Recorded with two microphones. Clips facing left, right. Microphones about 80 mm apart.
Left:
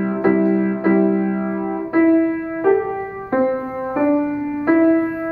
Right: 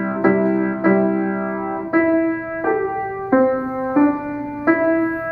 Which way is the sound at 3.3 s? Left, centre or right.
Centre.